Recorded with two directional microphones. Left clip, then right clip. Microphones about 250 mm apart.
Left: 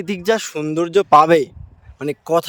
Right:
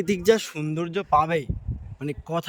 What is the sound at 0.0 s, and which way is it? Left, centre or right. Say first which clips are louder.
A man's voice: left 2 dB; centre.